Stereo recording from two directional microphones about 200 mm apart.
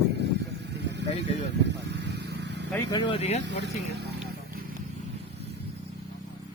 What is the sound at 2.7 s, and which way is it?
Speech, 20° left (ahead or behind).